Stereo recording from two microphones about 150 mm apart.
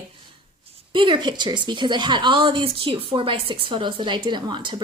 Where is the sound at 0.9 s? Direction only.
35° right (ahead or behind).